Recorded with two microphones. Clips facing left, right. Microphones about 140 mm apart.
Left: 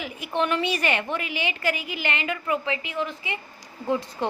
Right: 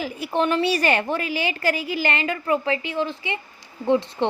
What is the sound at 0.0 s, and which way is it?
A woman's voice, 35° right (ahead or behind).